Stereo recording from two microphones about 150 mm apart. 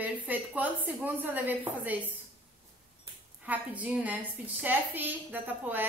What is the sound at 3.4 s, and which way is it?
A woman's voice, 10° right (ahead or behind).